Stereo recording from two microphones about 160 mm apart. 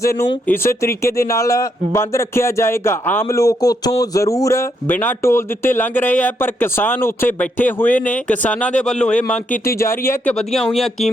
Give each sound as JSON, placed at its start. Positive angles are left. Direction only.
{"t": 0.0, "sound": "speech", "side_deg": 15}
{"t": 10.3, "sound": "speech", "side_deg": 0}